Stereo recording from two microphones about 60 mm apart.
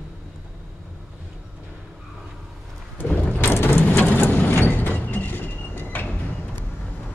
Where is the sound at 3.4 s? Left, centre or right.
Left.